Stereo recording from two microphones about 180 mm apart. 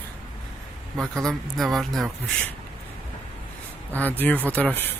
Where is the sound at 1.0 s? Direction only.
Centre (ahead or behind).